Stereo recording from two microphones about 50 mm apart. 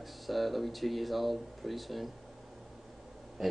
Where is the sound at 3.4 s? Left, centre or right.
Centre.